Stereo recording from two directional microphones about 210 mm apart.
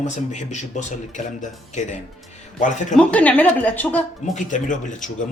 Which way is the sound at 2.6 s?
35° left (ahead or behind).